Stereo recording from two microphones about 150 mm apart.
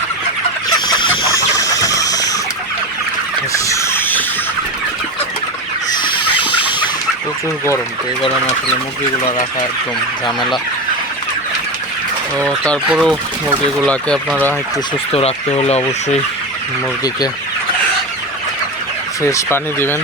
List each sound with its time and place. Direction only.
0.9 s chicken: 30° left (ahead or behind)
3.5 s a sound: 20° left (ahead or behind)
6.0 s chicken: 30° left (ahead or behind)
12.4 s speech: 5° left (ahead or behind)
15.1 s speech: 45° left (ahead or behind)
19.2 s speech: 15° left (ahead or behind)